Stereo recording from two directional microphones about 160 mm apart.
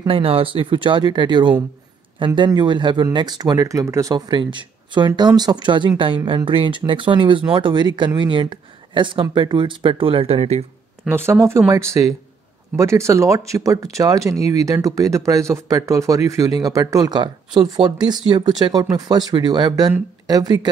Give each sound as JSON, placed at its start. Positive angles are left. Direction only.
{"t": 0.0, "sound": "speech", "side_deg": -35}
{"t": 11.1, "sound": "speech", "side_deg": -15}